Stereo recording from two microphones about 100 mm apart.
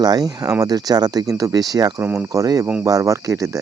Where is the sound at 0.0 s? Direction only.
40° right (ahead or behind).